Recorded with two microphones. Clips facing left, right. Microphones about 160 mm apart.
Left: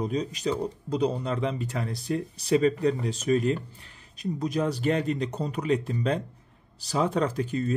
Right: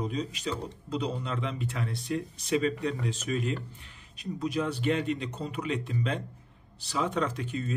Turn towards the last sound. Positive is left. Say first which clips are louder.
# left 6 dB
turn(degrees=40)  # may be behind; listen again after turning